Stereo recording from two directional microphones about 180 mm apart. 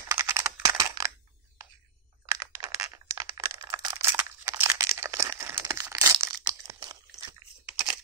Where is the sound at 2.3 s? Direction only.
20° right (ahead or behind).